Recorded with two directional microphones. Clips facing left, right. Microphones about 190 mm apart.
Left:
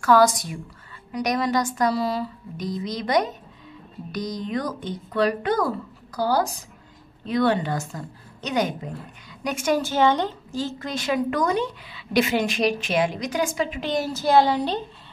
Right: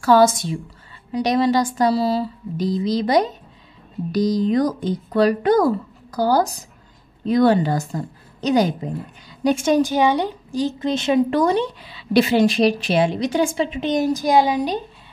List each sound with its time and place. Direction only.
0.0 s a woman's voice: 25° right (ahead or behind)